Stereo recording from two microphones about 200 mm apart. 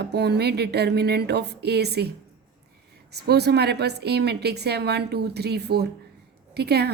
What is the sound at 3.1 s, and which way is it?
A woman's voice, 55° right (ahead or behind).